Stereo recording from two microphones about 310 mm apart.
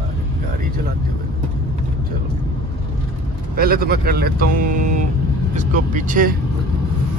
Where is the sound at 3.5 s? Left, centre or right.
Right.